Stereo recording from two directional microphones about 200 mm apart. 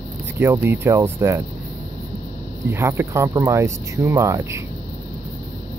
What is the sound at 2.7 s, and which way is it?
Speech, 15° right (ahead or behind).